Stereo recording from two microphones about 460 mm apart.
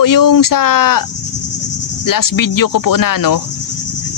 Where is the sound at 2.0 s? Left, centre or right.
Left.